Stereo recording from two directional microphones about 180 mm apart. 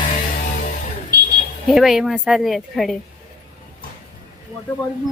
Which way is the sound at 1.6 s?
Centre (ahead or behind).